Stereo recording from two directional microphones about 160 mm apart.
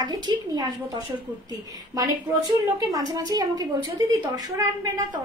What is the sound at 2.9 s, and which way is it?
A woman's voice, 25° right (ahead or behind).